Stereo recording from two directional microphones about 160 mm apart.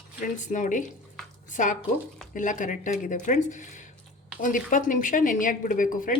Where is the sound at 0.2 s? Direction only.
50° left (ahead or behind).